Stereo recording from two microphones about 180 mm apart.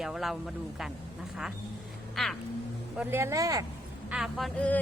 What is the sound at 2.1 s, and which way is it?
Speech, centre (ahead or behind).